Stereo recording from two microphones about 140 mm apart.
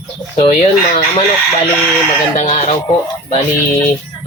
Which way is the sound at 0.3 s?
45° left (ahead or behind).